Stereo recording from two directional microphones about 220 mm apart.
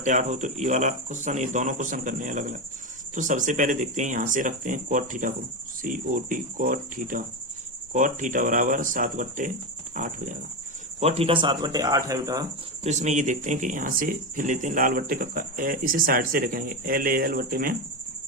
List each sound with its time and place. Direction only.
0.0 s speech: 35° right (ahead or behind); by 12.5 s 15° right (ahead or behind)
12.8 s speech: 30° right (ahead or behind)